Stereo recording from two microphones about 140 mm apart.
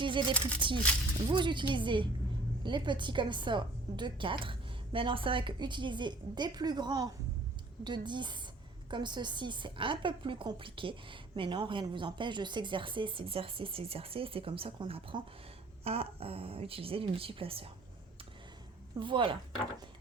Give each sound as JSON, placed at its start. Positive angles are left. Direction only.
{"t": 0.0, "sound": "a woman's voice", "side_deg": -35}
{"t": 18.9, "sound": "a woman's voice", "side_deg": -35}